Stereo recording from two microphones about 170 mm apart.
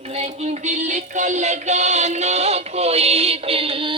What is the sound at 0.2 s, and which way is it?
Music, 40° right (ahead or behind).